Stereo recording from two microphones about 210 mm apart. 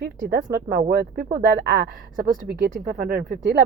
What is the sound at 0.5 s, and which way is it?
Child singing, 45° right (ahead or behind).